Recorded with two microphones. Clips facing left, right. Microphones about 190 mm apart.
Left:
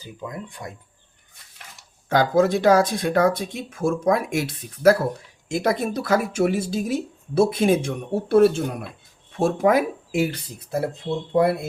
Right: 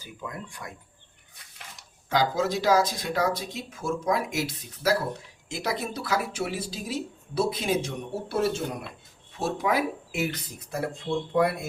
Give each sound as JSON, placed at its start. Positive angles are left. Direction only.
{"t": 0.0, "sound": "speech", "side_deg": 20}
{"t": 2.0, "sound": "speech", "side_deg": 55}